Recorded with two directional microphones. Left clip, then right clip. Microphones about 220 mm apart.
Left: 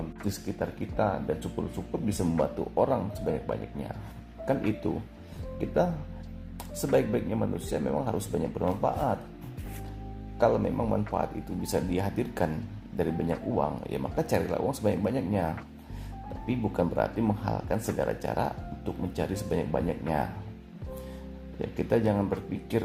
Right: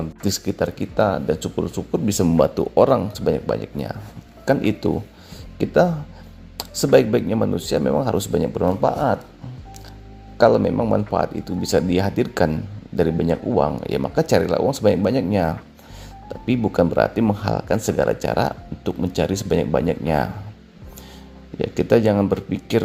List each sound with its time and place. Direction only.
0.3 s speech: 45° right (ahead or behind)
10.3 s speech: 45° right (ahead or behind)
21.6 s speech: 45° right (ahead or behind)